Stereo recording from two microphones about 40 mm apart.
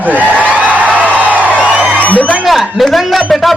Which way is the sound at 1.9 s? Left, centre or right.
Left.